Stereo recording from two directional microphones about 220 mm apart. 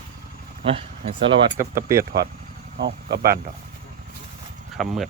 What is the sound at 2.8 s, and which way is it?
Insect, 45° right (ahead or behind).